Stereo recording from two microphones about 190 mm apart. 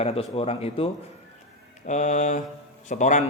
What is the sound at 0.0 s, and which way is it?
Speech, 30° left (ahead or behind).